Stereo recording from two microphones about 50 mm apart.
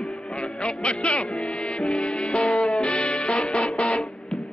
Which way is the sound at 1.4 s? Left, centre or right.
Centre.